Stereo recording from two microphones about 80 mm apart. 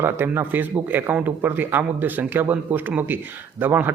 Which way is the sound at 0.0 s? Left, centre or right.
Right.